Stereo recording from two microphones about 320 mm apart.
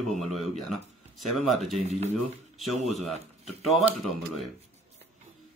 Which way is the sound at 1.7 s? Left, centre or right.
Centre.